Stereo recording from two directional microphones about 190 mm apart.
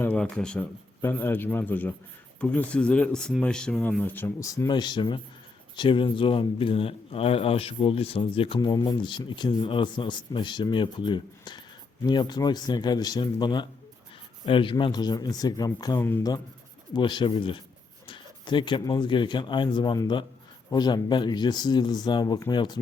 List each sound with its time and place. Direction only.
0.0 s speech: 5° left (ahead or behind)